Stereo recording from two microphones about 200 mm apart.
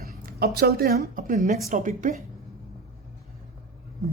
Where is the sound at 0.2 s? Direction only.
50° right (ahead or behind).